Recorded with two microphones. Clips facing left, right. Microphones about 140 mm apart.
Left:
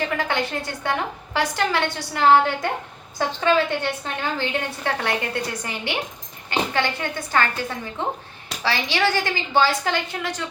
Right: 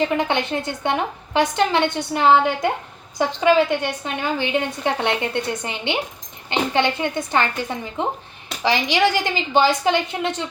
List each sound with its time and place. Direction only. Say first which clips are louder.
0.2 s a woman's voice: right 3 dB; 20° right (ahead or behind)